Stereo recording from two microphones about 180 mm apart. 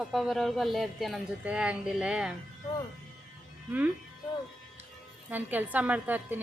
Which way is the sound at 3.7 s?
10° right (ahead or behind).